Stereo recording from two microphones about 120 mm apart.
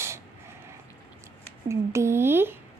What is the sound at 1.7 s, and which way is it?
Speech, 25° right (ahead or behind).